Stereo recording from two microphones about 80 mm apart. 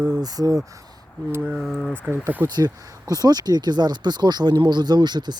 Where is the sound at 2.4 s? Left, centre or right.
Right.